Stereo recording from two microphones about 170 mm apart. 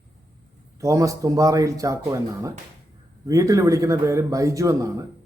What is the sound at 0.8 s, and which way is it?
Speech, 20° right (ahead or behind).